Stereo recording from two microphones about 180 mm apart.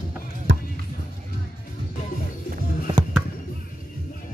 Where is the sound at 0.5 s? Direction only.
90° right.